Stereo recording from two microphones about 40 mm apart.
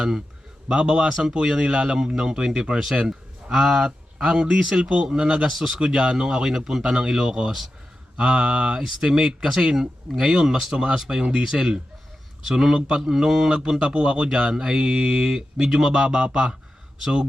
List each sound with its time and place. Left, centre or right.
0.7 s speech: right
4.8 s speech: right
5.5 s speech: centre
5.8 s speech: right
8.8 s speech: centre